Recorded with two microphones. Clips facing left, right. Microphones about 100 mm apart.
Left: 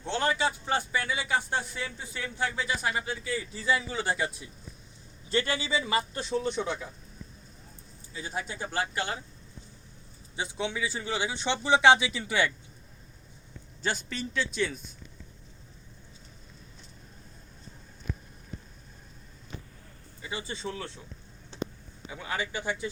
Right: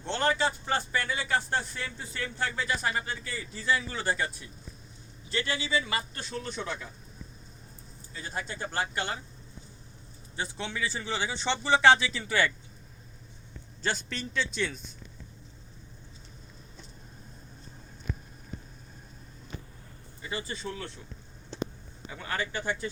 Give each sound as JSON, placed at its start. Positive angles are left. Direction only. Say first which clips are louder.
{"t": 0.0, "sound": "speech", "louder": "even", "side_deg": 5}
{"t": 5.3, "sound": "a man's voice", "louder": "left 3 dB", "side_deg": 40}
{"t": 5.7, "sound": "speech", "louder": "left 3 dB", "side_deg": 25}
{"t": 6.3, "sound": "speech", "louder": "left 6 dB", "side_deg": 10}
{"t": 8.1, "sound": "speech", "louder": "left 1 dB", "side_deg": 5}
{"t": 10.3, "sound": "speech", "louder": "left 3 dB", "side_deg": 15}
{"t": 13.8, "sound": "speech", "louder": "even", "side_deg": 5}
{"t": 20.5, "sound": "speech", "louder": "left 1 dB", "side_deg": 20}
{"t": 22.0, "sound": "speech", "louder": "even", "side_deg": 10}